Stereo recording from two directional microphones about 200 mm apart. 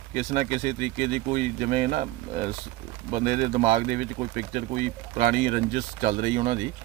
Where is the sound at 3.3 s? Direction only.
45° right (ahead or behind).